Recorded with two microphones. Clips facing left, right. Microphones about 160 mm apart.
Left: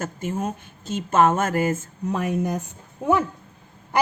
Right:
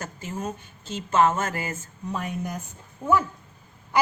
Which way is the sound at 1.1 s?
45° left (ahead or behind).